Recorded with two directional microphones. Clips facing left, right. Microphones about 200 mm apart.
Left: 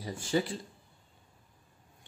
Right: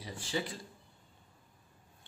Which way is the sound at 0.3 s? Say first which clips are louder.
Left 7 dB; 45° left (ahead or behind).